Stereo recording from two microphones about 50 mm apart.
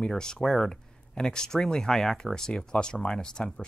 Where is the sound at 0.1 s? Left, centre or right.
Centre.